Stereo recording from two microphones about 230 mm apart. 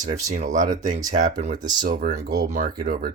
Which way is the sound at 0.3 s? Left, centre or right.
Right.